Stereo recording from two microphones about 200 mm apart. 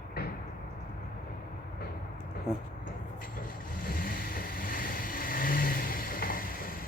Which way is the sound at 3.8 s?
45° left (ahead or behind).